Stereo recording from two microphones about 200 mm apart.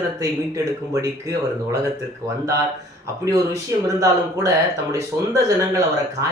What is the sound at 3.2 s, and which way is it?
Speech, 15° right (ahead or behind).